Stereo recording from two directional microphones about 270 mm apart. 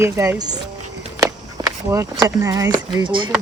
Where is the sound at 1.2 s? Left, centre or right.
Centre.